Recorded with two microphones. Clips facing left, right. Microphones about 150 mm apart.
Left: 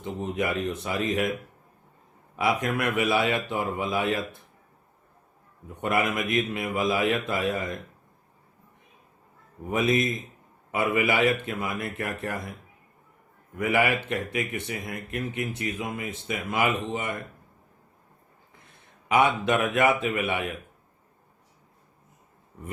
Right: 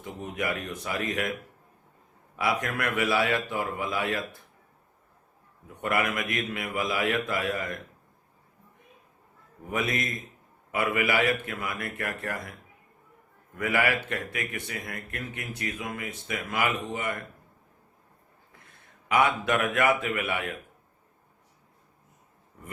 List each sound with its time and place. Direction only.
0.2 s speech: 25° left (ahead or behind)
2.3 s speech: 20° left (ahead or behind)
5.8 s speech: 20° left (ahead or behind)
9.6 s speech: 20° left (ahead or behind)
13.6 s speech: 25° left (ahead or behind)
19.0 s speech: 20° left (ahead or behind)